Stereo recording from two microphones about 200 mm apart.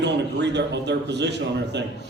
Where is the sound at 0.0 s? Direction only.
60° right (ahead or behind).